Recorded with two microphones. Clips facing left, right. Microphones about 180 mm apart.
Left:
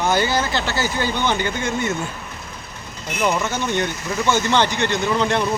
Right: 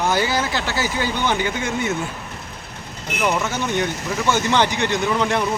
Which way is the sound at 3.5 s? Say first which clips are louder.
Even; 5° right (ahead or behind).